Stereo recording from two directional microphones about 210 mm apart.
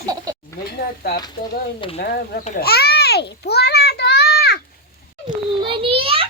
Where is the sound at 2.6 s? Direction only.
50° left (ahead or behind).